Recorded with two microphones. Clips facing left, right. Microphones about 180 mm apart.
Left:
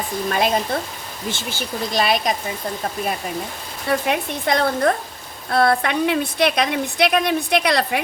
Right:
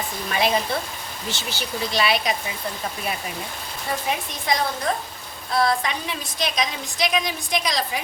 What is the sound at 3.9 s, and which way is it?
A woman's voice, 60° left (ahead or behind).